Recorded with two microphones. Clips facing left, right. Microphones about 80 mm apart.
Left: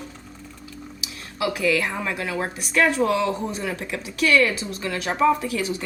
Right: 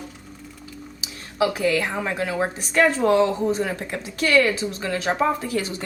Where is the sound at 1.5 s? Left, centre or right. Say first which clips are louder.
Right 1 dB; right.